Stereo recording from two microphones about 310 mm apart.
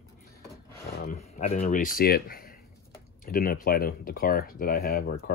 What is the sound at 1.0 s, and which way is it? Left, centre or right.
Speech, left.